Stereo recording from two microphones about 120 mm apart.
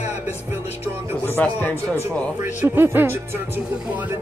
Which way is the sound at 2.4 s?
15° right (ahead or behind).